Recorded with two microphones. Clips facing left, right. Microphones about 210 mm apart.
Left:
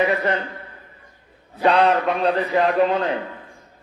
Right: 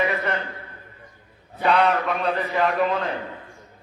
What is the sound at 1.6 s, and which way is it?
Speech, 35° left (ahead or behind).